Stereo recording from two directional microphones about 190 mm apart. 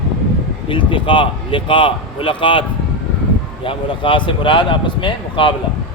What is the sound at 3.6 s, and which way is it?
Speech, 25° left (ahead or behind).